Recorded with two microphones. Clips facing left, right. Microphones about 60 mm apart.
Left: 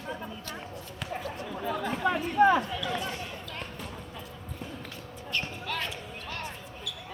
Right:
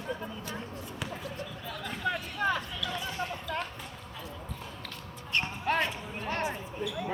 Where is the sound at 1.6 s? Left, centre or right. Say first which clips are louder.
Left 7 dB; left.